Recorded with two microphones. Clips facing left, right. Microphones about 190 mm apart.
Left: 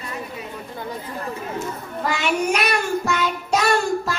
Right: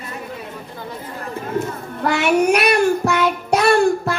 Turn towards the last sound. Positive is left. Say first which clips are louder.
# right 5 dB
turn(degrees=-60)  # may be behind; listen again after turning